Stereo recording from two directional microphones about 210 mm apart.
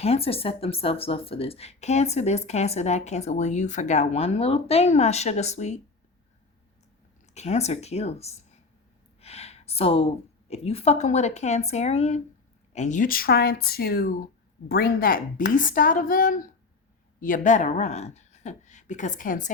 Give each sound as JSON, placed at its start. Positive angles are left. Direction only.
{"t": 0.0, "sound": "speech", "side_deg": 30}
{"t": 7.3, "sound": "speech", "side_deg": 30}